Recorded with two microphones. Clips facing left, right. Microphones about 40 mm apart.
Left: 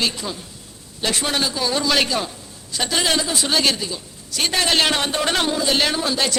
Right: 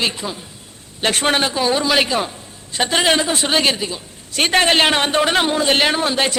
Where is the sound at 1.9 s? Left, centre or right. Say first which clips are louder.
Right 3 dB; centre; by 5.2 s right.